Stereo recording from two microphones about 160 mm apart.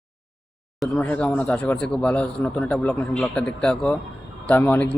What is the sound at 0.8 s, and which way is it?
Speech, 10° left (ahead or behind).